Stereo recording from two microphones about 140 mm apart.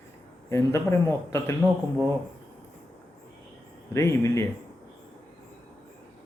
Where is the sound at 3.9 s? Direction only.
20° left (ahead or behind).